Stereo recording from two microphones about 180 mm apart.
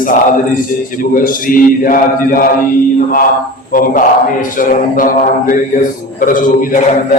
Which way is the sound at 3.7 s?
50° left (ahead or behind).